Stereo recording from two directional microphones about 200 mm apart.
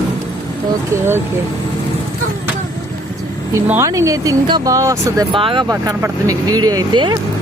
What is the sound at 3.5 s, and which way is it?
Speech, 10° right (ahead or behind).